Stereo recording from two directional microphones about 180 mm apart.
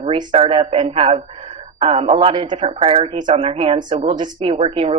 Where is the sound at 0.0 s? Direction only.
30° right (ahead or behind).